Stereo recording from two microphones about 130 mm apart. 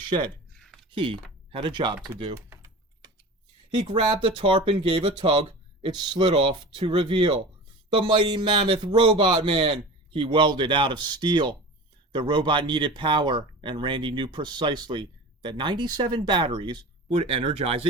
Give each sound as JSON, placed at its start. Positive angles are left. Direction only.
{"t": 0.5, "sound": "a sound", "side_deg": 5}
{"t": 0.9, "sound": "speech", "side_deg": -40}
{"t": 2.5, "sound": "typing", "side_deg": -30}
{"t": 3.8, "sound": "speech", "side_deg": -40}